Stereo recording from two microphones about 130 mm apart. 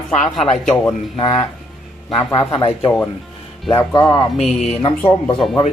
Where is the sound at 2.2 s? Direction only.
35° left (ahead or behind).